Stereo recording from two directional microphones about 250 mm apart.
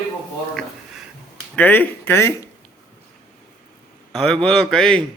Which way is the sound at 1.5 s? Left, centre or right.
Centre.